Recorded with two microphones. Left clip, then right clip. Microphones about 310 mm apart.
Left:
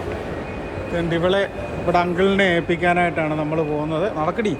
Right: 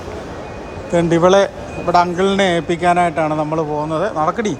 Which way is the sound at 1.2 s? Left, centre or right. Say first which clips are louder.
Right 7 dB; centre.